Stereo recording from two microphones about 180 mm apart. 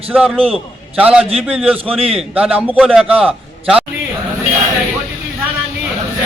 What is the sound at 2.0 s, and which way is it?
Speech, 30° right (ahead or behind).